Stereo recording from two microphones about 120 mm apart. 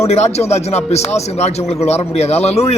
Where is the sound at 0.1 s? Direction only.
65° left (ahead or behind).